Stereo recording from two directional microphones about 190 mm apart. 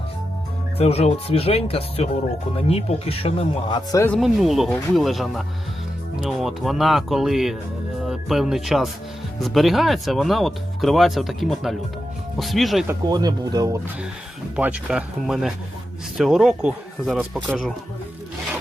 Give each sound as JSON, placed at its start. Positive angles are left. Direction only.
{"t": 0.8, "sound": "speech", "side_deg": 35}
{"t": 4.2, "sound": "speech", "side_deg": 0}
{"t": 12.9, "sound": "speech", "side_deg": -20}
{"t": 14.5, "sound": "speech", "side_deg": -5}